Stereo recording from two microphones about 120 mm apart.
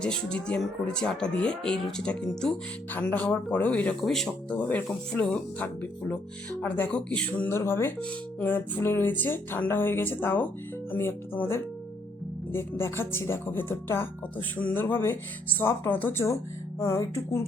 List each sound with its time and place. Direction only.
0.0 s speech: 10° left (ahead or behind); by 17.4 s 25° left (ahead or behind)